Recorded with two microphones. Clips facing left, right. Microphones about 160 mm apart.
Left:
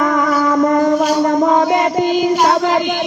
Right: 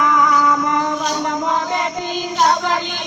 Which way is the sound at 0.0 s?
45° left (ahead or behind).